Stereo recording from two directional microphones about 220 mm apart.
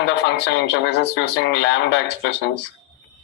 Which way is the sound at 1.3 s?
55° left (ahead or behind).